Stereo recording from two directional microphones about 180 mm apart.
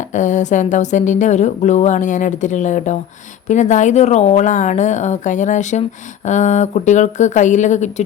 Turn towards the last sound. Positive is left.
turn(degrees=40)  # may be behind; listen again after turning